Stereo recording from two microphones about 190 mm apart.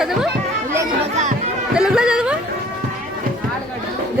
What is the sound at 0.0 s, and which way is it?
Chatter, 5° right (ahead or behind).